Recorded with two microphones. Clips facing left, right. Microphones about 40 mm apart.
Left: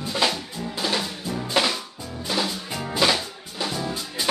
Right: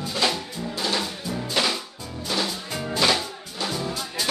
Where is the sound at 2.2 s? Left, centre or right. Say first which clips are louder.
Left 1 dB; centre.